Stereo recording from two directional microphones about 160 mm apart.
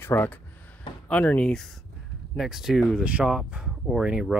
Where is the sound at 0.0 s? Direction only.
15° left (ahead or behind).